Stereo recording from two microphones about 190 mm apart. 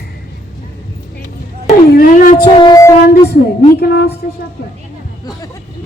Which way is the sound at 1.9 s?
45° left (ahead or behind).